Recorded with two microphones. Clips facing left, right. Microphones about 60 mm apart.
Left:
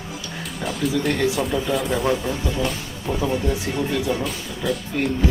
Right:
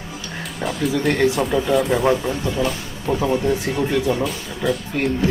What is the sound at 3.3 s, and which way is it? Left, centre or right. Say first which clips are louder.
Speech: right 4 dB; right.